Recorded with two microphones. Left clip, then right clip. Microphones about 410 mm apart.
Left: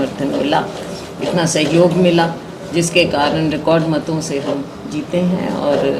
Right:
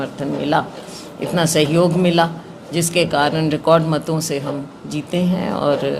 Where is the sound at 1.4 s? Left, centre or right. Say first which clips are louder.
Left 2 dB; right.